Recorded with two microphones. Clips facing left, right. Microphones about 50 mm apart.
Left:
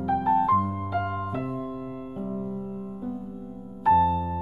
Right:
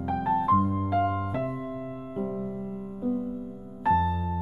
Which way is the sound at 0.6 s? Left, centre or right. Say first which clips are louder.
Right 3 dB; centre.